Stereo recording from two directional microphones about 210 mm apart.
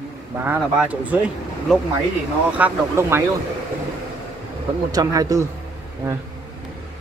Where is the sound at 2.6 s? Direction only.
10° right (ahead or behind).